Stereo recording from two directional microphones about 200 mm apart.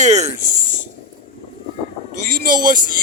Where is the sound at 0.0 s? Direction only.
35° right (ahead or behind).